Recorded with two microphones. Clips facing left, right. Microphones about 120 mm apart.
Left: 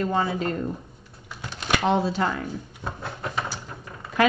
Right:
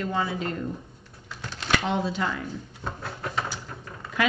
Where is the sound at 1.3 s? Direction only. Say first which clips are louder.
Left 1 dB; 15° left (ahead or behind).